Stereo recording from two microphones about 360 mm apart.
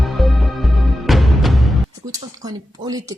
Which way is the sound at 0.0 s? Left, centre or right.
Centre.